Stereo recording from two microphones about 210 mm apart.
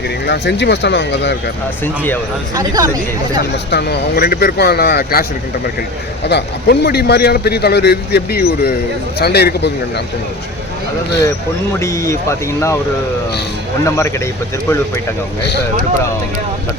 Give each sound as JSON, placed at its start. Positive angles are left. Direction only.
{"t": 0.3, "sound": "speech", "side_deg": 55}
{"t": 2.6, "sound": "speech", "side_deg": -15}
{"t": 3.7, "sound": "speech", "side_deg": 50}
{"t": 6.2, "sound": "speech", "side_deg": 50}
{"t": 11.8, "sound": "speech", "side_deg": 15}
{"t": 13.8, "sound": "speech", "side_deg": 15}